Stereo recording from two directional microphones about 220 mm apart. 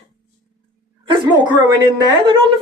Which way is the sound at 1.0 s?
20° right (ahead or behind).